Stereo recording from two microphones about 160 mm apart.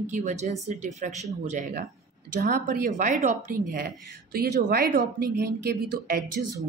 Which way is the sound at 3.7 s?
70° right (ahead or behind).